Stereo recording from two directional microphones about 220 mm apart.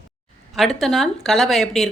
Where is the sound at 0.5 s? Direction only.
Centre (ahead or behind).